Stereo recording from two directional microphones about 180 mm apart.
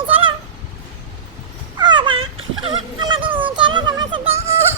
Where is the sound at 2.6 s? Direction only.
25° right (ahead or behind).